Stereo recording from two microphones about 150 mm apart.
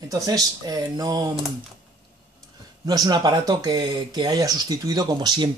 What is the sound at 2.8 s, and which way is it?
Speech, 25° right (ahead or behind).